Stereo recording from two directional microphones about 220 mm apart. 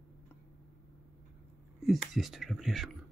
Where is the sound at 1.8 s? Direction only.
Centre (ahead or behind).